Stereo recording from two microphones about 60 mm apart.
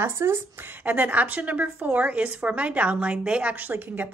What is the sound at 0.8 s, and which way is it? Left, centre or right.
A woman's voice, right.